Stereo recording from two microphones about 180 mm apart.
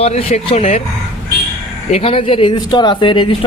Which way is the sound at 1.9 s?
35° left (ahead or behind).